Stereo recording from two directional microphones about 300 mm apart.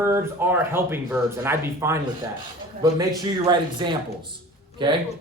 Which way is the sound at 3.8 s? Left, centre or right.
Centre.